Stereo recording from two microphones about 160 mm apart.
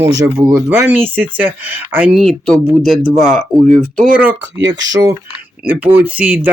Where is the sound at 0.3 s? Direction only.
15° right (ahead or behind); by 4.0 s centre (ahead or behind).